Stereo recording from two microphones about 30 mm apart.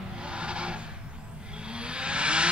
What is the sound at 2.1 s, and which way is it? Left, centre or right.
Vehicle, right.